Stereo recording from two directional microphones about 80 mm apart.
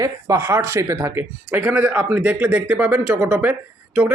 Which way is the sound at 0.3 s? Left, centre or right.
Right.